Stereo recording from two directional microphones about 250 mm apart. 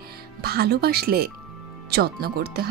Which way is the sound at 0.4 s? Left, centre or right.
Right.